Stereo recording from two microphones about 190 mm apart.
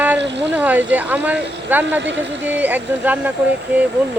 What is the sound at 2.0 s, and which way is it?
Speech, 70° right (ahead or behind).